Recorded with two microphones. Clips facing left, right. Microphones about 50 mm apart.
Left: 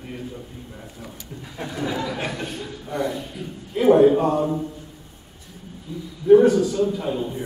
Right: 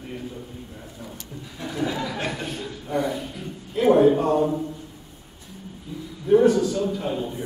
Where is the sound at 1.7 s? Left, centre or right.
Centre.